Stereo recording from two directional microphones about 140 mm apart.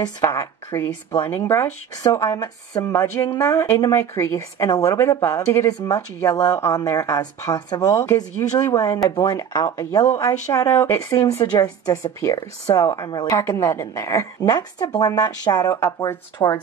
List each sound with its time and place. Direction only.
0.0 s a woman's voice: 20° left (ahead or behind)